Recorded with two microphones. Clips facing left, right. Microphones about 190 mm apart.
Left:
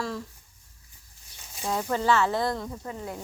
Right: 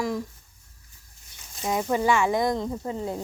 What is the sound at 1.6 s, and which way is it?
Speech, 15° right (ahead or behind).